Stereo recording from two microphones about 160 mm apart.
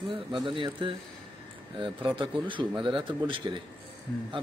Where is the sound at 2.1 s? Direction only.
30° right (ahead or behind).